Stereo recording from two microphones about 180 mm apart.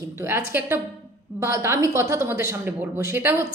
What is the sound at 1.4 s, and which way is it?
Speech, 15° right (ahead or behind).